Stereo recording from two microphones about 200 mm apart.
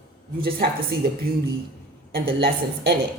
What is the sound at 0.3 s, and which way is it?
Speech, 50° right (ahead or behind).